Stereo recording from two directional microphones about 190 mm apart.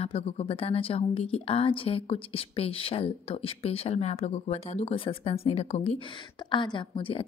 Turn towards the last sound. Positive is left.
turn(degrees=30)  # may be behind; listen again after turning